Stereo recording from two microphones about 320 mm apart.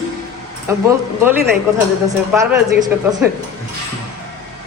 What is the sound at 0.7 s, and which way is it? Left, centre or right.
Speech, centre.